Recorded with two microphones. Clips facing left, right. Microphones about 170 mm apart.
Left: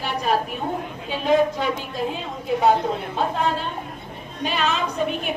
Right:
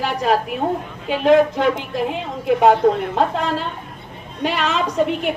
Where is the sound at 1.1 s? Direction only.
75° right (ahead or behind).